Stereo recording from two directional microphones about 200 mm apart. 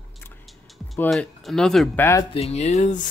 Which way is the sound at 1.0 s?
5° left (ahead or behind).